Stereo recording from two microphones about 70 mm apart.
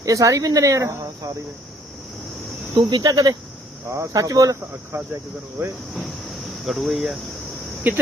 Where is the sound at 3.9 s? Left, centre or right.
Right.